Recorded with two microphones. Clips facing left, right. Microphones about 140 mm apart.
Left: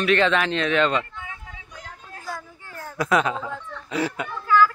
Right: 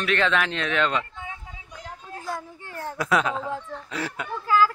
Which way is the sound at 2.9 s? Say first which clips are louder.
Left 2 dB; centre (ahead or behind).